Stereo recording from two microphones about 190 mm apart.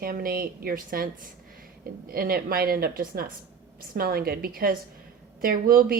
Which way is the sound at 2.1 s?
50° right (ahead or behind).